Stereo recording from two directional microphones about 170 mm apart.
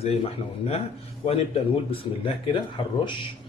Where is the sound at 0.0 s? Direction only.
40° left (ahead or behind).